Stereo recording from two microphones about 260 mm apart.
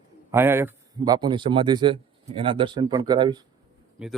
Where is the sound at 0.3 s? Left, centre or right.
Centre.